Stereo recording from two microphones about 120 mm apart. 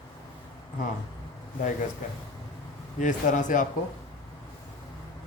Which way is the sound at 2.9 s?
90° left.